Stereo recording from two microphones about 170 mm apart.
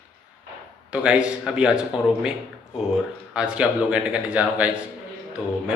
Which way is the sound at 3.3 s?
5° right (ahead or behind).